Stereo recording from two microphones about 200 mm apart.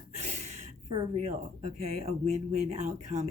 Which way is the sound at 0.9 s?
35° right (ahead or behind).